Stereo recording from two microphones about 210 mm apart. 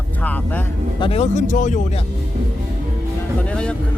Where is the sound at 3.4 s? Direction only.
5° left (ahead or behind).